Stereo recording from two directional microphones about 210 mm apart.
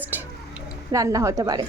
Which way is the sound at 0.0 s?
10° right (ahead or behind).